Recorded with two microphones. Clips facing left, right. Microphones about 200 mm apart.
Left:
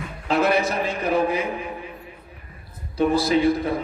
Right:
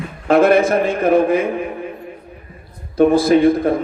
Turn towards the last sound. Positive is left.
turn(degrees=-50)  # may be behind; listen again after turning